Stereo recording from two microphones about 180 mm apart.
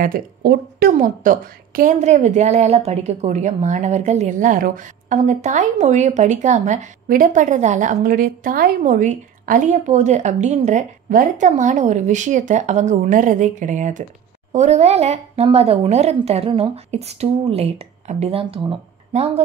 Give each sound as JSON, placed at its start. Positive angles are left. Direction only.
{"t": 0.0, "sound": "speech", "side_deg": -55}
{"t": 0.9, "sound": "a woman's voice", "side_deg": -45}